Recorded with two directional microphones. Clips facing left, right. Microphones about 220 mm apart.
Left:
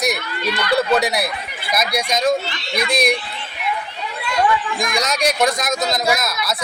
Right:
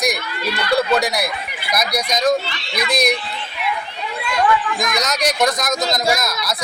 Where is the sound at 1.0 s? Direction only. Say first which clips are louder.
Even; 5° left (ahead or behind).